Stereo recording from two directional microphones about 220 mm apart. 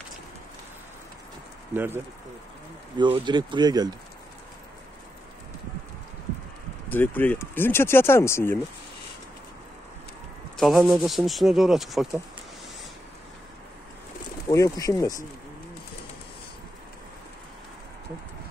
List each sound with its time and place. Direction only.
1.7 s speech: 10° right (ahead or behind)
3.0 s speech: 20° right (ahead or behind)
6.9 s speech: 10° left (ahead or behind)
10.6 s speech: centre (ahead or behind)
14.5 s speech: 15° left (ahead or behind)